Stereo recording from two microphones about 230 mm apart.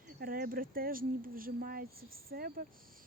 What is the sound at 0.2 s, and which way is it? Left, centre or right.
Speech, right.